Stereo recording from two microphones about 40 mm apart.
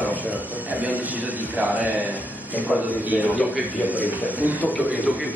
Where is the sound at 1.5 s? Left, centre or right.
Right.